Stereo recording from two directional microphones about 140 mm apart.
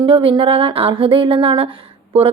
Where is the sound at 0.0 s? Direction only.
40° right (ahead or behind).